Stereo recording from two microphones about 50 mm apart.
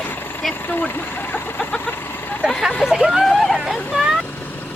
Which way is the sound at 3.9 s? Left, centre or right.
Right.